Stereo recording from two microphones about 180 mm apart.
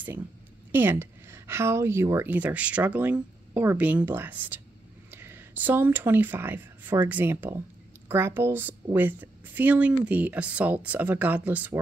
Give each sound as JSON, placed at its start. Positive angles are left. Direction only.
{"t": 0.7, "sound": "a woman's voice", "side_deg": -10}